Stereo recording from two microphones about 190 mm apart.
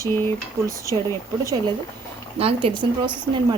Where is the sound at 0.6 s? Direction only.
15° right (ahead or behind).